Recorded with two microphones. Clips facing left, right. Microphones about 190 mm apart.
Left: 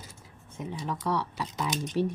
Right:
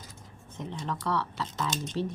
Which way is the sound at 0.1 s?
10° left (ahead or behind).